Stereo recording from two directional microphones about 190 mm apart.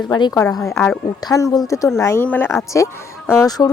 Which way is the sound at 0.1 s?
20° left (ahead or behind).